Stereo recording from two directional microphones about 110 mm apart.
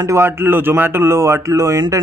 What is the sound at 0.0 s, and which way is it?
Speech, 25° right (ahead or behind).